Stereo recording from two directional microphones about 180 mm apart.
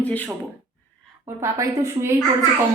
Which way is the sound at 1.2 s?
15° right (ahead or behind).